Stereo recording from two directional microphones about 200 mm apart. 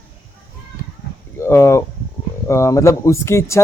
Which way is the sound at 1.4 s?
15° left (ahead or behind).